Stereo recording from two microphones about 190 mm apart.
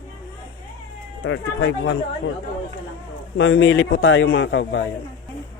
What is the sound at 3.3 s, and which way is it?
A man's voice, 90° left.